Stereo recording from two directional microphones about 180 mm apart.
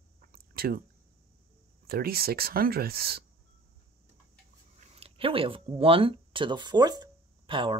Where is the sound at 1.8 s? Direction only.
60° right (ahead or behind).